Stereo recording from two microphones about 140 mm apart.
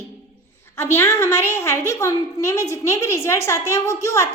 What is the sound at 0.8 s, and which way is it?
A woman's voice, 20° left (ahead or behind).